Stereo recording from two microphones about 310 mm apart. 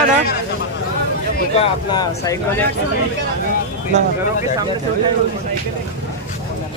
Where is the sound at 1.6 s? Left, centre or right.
Centre.